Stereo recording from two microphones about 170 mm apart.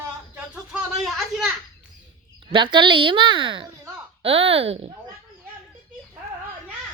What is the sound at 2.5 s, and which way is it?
A woman's voice, 30° right (ahead or behind).